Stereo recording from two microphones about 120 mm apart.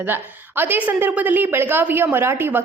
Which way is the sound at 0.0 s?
15° right (ahead or behind).